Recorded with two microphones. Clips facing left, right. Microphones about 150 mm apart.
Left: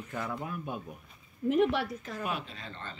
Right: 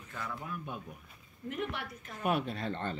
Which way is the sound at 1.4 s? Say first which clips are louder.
Left 11 dB; 90° left.